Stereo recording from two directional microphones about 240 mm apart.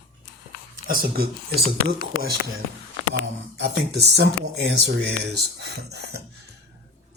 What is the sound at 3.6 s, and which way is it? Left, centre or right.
Speech, right.